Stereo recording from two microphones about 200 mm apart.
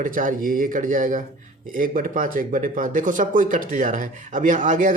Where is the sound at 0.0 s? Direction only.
40° right (ahead or behind).